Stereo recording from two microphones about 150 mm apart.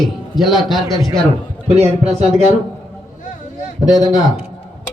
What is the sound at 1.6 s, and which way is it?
Speech, 45° right (ahead or behind).